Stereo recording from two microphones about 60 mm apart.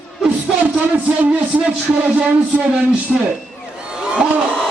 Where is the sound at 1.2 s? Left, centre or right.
Right.